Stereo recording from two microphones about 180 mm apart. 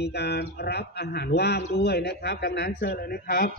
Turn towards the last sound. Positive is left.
turn(degrees=55)  # may be behind; listen again after turning